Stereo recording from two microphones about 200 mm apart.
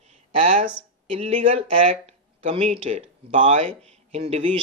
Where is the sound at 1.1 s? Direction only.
30° right (ahead or behind).